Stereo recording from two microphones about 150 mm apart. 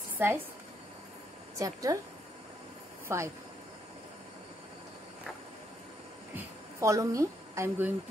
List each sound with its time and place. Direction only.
0.2 s a woman's voice: 15° right (ahead or behind)
1.6 s speech: 25° right (ahead or behind)
3.1 s speech: 20° right (ahead or behind)
6.3 s a sound: 20° right (ahead or behind)